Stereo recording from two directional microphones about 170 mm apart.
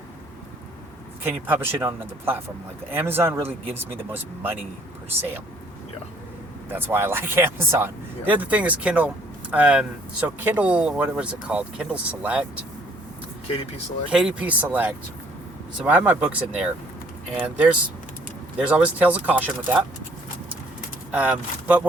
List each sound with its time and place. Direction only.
1.2 s speech: 10° right (ahead or behind)
2.9 s speech: 15° right (ahead or behind)
3.4 s speech: 35° right (ahead or behind)
6.7 s speech: 10° right (ahead or behind)
14.1 s speech: 5° right (ahead or behind)
21.1 s speech: 10° right (ahead or behind)